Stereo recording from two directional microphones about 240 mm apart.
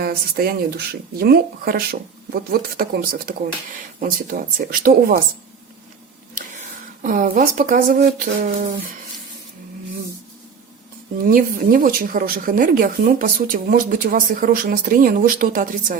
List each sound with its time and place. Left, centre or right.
0.0 s speech: right
6.3 s speech: right
11.3 s speech: right